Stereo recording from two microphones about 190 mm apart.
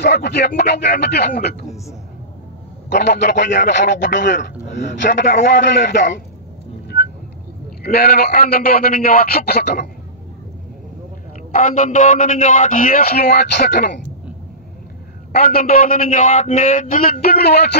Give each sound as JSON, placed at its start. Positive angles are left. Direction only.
{"t": 0.0, "sound": "a man's voice", "side_deg": 60}
{"t": 2.9, "sound": "a man's voice", "side_deg": 60}
{"t": 5.2, "sound": "a man's voice", "side_deg": 55}
{"t": 7.8, "sound": "a man's voice", "side_deg": 55}
{"t": 11.5, "sound": "a man's voice", "side_deg": 40}
{"t": 15.3, "sound": "a man's voice", "side_deg": 50}